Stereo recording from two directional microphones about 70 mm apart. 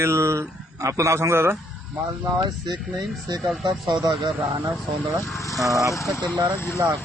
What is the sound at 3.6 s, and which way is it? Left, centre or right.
Speech, right.